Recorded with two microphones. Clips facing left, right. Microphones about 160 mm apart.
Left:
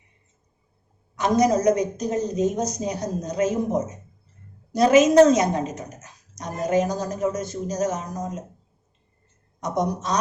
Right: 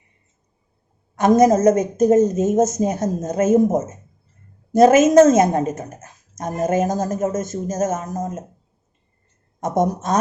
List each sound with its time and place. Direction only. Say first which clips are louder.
1.1 s a woman's voice: right 6 dB; 50° right (ahead or behind)
9.6 s a woman's voice: right 5 dB; 50° right (ahead or behind)